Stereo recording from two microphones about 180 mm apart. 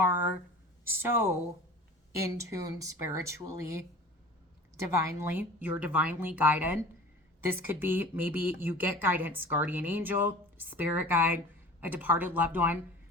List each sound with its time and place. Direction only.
0.9 s speech: 15° right (ahead or behind)